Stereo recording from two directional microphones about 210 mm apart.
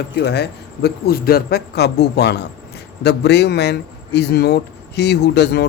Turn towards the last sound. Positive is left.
turn(degrees=55)  # may be behind; listen again after turning